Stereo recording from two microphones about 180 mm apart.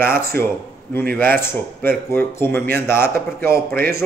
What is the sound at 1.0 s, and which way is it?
Speech, 55° right (ahead or behind).